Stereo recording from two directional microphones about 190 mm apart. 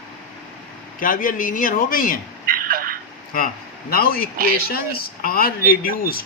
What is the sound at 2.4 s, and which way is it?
Telephone, 50° right (ahead or behind).